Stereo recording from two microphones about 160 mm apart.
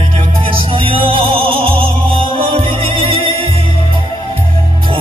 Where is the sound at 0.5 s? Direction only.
35° right (ahead or behind).